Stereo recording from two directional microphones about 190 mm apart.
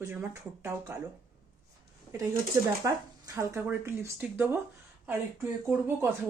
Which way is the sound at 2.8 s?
15° right (ahead or behind).